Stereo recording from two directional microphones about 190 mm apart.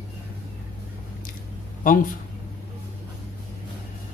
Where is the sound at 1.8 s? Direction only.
45° left (ahead or behind).